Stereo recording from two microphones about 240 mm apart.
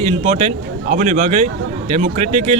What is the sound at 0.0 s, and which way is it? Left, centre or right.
Speech, right.